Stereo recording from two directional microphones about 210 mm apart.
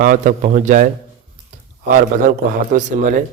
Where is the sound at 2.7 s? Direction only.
35° right (ahead or behind).